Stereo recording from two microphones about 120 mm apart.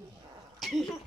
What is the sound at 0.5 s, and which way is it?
Sneeze, centre (ahead or behind).